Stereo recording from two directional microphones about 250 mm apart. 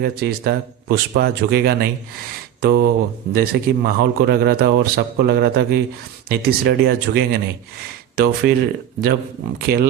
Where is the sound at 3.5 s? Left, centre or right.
Right.